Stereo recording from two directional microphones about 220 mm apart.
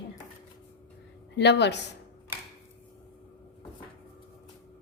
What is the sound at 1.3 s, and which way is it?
Speech, 50° left (ahead or behind).